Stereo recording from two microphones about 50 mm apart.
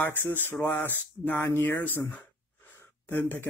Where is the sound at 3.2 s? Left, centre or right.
Left.